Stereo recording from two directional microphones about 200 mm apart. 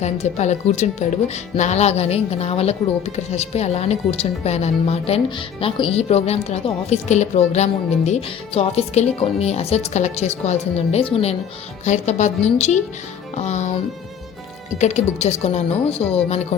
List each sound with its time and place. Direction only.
0.0 s a woman's voice: 35° left (ahead or behind)
14.8 s a woman's voice: 35° left (ahead or behind)